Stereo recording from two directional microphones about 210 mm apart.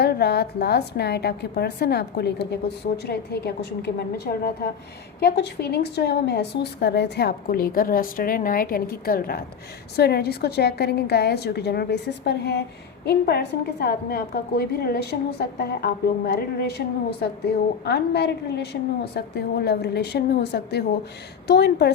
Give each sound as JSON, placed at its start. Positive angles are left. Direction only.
{"t": 0.0, "sound": "a woman's voice", "side_deg": 50}